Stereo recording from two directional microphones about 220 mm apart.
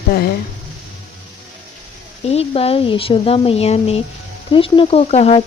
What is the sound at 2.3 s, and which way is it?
Speech, 25° left (ahead or behind).